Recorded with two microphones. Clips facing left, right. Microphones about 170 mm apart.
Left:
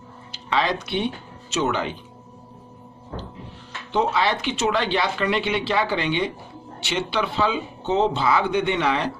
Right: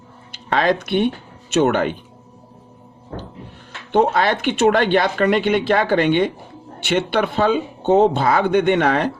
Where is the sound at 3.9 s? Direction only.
60° right (ahead or behind).